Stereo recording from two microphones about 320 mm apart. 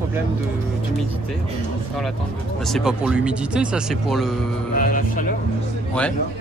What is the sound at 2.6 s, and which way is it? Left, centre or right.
Speech, centre.